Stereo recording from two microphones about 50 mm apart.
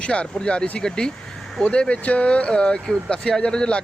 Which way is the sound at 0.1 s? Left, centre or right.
Left.